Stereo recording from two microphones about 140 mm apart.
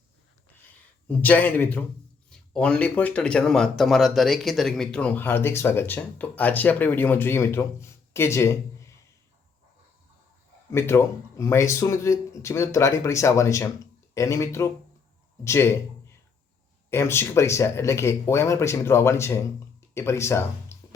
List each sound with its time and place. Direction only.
1.0 s speech: 10° left (ahead or behind)
10.7 s speech: 20° left (ahead or behind)